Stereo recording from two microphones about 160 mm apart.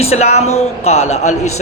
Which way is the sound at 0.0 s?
40° left (ahead or behind).